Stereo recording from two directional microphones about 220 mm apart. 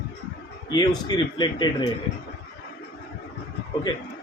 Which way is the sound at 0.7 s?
20° left (ahead or behind).